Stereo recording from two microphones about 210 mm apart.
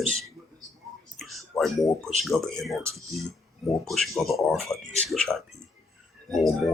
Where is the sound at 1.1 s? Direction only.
Centre (ahead or behind).